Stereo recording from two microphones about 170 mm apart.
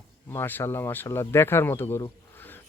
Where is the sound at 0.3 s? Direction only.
10° left (ahead or behind).